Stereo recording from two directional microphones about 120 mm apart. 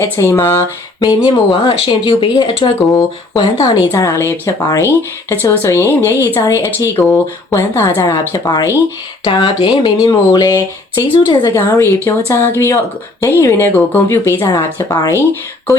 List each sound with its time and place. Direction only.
0.0 s speech: 25° left (ahead or behind)
1.0 s speech: 40° left (ahead or behind)
3.3 s speech: 35° left (ahead or behind)
11.5 s speech: 25° left (ahead or behind)